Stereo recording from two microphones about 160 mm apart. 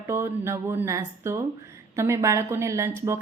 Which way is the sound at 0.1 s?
15° right (ahead or behind).